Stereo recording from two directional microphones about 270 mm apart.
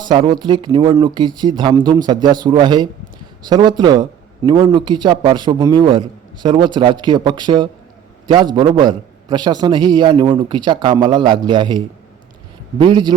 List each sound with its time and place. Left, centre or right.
0.0 s a man's voice: centre
12.8 s a man's voice: centre